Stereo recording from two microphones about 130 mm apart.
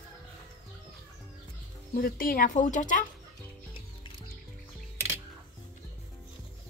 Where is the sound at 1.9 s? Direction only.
90° left.